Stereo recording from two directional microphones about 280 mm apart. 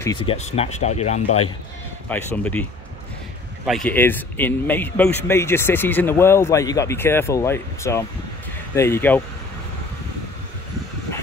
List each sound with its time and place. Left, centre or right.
0.3 s speech: left
2.0 s speech: centre
3.6 s speech: centre